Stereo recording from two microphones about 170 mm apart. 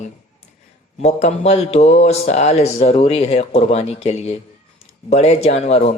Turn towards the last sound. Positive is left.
turn(degrees=40)  # may be behind; listen again after turning